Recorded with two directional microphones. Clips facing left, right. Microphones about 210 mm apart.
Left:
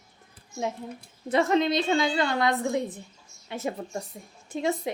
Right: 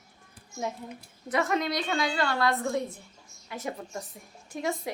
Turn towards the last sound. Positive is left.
turn(degrees=25)  # may be behind; listen again after turning